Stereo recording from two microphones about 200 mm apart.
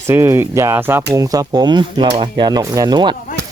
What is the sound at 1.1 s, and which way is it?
Cutlery, 15° right (ahead or behind).